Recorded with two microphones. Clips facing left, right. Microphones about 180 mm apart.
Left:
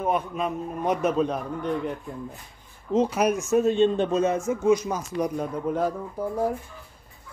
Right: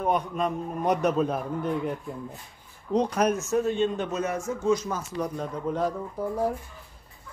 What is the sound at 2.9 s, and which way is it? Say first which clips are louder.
Speech: left 2 dB; 5° left (ahead or behind).